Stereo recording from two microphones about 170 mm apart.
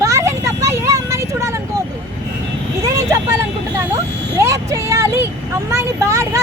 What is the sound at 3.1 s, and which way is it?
Vehicle, 15° right (ahead or behind).